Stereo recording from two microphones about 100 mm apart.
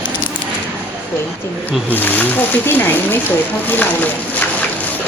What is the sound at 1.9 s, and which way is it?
Speech, 20° left (ahead or behind).